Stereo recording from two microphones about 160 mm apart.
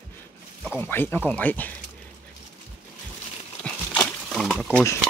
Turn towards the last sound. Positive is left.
turn(degrees=5)  # may be behind; listen again after turning